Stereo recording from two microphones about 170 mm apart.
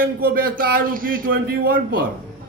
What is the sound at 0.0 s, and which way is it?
A man's voice, 60° right (ahead or behind).